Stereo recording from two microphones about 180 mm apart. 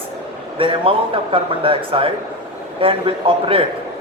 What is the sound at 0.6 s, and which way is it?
Speech, 30° right (ahead or behind).